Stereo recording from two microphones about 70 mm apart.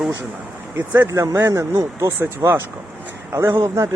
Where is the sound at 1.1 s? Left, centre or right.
Right.